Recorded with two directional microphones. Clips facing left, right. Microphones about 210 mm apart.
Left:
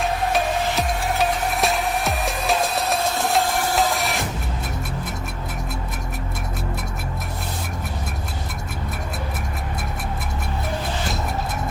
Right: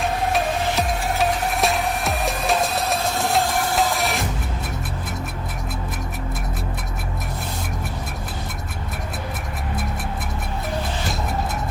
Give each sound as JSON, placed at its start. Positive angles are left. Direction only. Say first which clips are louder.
{"t": 0.0, "sound": "music", "louder": "even", "side_deg": 0}